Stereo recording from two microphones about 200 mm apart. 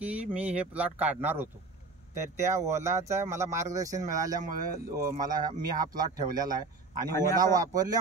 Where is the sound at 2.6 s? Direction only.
15° right (ahead or behind).